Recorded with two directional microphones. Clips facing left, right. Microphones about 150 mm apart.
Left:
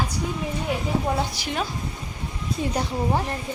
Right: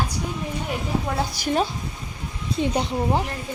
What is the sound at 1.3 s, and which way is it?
Speech, 45° right (ahead or behind).